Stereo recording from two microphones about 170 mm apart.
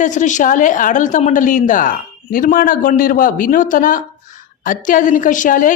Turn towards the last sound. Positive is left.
turn(degrees=50)  # may be behind; listen again after turning